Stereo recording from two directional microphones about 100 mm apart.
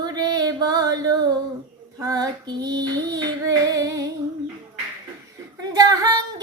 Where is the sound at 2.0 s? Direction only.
35° right (ahead or behind).